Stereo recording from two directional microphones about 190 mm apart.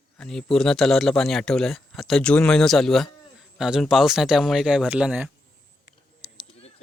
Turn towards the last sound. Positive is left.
turn(degrees=35)  # may be behind; listen again after turning